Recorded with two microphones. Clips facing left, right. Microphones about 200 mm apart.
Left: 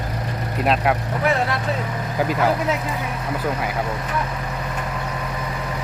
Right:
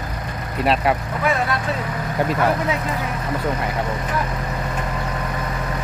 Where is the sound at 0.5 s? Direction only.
Centre (ahead or behind).